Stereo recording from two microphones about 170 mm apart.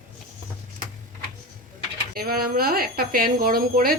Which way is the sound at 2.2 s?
60° right (ahead or behind).